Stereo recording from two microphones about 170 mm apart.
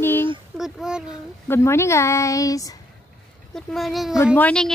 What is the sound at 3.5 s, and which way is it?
Speech, centre (ahead or behind).